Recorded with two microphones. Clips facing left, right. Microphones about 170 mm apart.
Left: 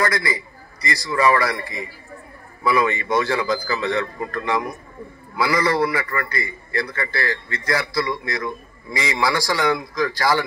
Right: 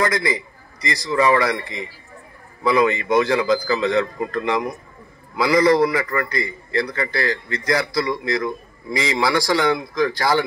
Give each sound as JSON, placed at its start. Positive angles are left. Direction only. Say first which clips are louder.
{"t": 0.0, "sound": "a man's voice", "louder": "right 2 dB", "side_deg": -20}